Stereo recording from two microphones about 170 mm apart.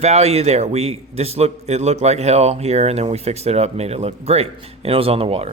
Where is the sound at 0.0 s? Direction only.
40° right (ahead or behind).